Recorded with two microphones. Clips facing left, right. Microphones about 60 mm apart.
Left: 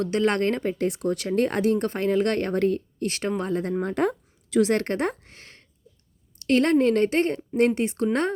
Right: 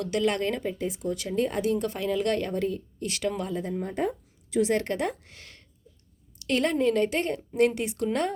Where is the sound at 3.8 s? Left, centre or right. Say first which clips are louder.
Left 5 dB; left.